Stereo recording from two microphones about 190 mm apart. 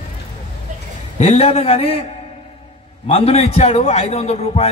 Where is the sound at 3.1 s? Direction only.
30° left (ahead or behind).